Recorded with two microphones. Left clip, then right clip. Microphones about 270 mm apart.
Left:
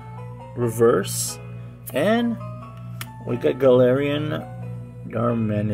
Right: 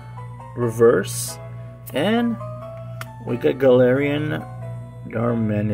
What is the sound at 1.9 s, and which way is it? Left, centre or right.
Speech, centre.